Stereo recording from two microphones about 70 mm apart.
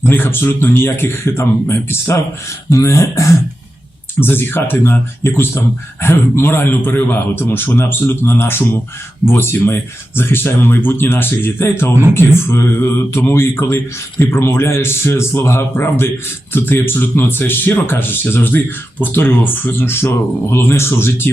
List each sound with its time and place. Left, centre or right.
0.0 s speech: left
4.2 s speech: left